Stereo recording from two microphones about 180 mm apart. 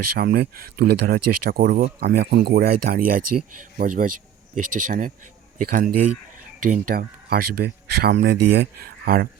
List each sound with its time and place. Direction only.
0.2 s speech: 60° right (ahead or behind)
9.0 s speech: 55° right (ahead or behind)